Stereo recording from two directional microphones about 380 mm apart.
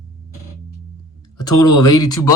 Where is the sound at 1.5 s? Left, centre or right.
Centre.